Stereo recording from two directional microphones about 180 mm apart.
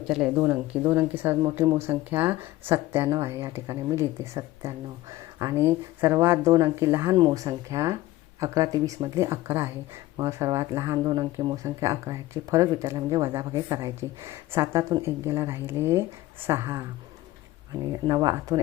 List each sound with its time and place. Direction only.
0.1 s speech: 5° right (ahead or behind)
17.8 s speech: 20° right (ahead or behind)